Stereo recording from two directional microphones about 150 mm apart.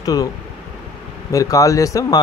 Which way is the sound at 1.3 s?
25° left (ahead or behind).